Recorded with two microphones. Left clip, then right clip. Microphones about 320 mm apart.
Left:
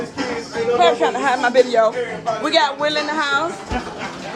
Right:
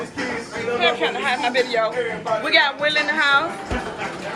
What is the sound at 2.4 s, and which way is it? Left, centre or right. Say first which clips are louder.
A woman's voice: left 1 dB; centre.